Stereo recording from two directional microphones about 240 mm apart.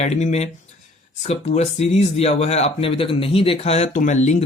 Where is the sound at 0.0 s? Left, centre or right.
Left.